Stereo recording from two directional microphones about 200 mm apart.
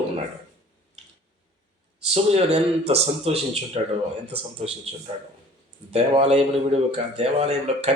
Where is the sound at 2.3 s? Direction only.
30° right (ahead or behind).